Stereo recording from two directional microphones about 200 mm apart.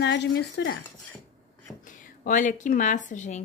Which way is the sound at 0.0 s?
60° left (ahead or behind).